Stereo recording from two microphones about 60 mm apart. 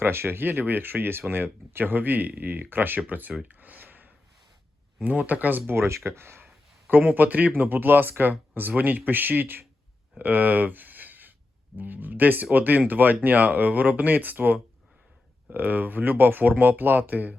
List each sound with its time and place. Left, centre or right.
0.0 s speech: right
3.6 s a sound: right
5.0 s speech: right
5.7 s speech: right
6.8 s speech: right
10.2 s a sound: right
11.8 s speech: right